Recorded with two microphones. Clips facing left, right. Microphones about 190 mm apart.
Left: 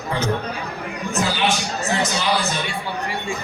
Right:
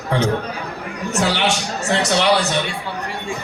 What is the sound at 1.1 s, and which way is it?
A man's voice, 80° right.